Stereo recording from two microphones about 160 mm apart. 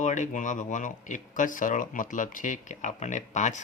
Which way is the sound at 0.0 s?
50° left (ahead or behind).